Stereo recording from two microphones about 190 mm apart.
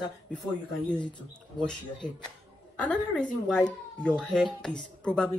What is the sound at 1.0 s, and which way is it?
Speech, 25° left (ahead or behind).